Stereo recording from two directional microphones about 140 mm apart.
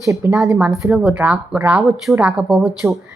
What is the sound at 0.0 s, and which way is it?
Speech, 20° right (ahead or behind).